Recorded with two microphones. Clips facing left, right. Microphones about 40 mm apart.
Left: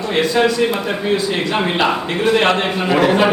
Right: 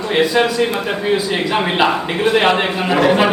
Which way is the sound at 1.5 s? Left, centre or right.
Centre.